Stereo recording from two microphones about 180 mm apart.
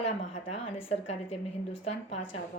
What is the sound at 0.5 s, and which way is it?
Speech, 35° left (ahead or behind).